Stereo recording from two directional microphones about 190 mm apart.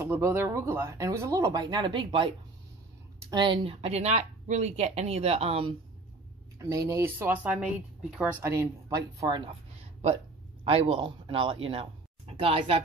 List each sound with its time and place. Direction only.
0.0 s speech: 15° right (ahead or behind); by 5.8 s 30° right (ahead or behind)
6.7 s speech: 15° right (ahead or behind)